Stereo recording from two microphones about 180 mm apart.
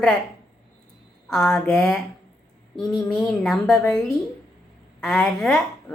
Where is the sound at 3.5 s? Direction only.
5° left (ahead or behind).